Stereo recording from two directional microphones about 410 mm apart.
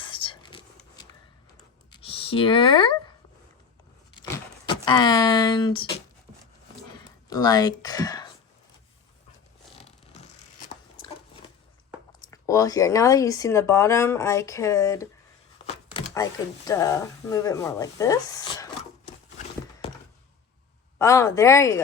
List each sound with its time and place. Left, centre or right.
0.1 s whispering: centre
1.9 s a sound: centre
4.9 s speech: centre
7.3 s speech: centre
9.7 s a sound: centre
12.3 s speech: centre
21.0 s speech: centre